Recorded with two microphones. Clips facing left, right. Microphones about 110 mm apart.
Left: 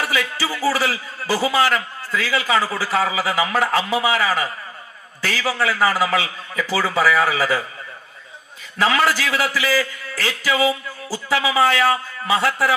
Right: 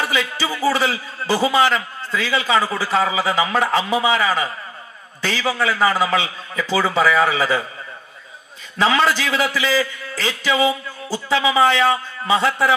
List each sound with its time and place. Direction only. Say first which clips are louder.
0.0 s a man's voice: right 1 dB; 20° right (ahead or behind)
8.7 s a man's voice: right 1 dB; 25° right (ahead or behind)